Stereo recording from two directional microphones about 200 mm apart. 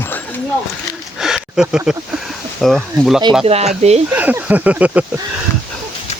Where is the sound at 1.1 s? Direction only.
5° right (ahead or behind).